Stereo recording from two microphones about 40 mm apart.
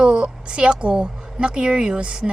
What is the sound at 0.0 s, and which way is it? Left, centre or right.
A woman's voice, right.